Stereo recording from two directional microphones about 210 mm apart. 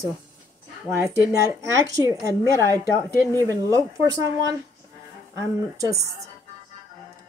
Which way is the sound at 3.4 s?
15° right (ahead or behind).